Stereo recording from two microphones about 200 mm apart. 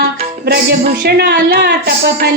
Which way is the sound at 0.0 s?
50° right (ahead or behind).